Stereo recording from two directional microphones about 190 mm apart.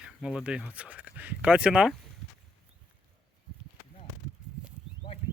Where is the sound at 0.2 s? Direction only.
5° right (ahead or behind).